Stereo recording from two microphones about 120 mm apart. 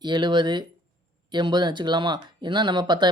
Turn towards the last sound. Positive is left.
turn(degrees=-40)  # may be behind; listen again after turning